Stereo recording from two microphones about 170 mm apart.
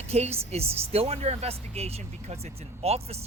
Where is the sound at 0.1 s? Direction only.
40° right (ahead or behind).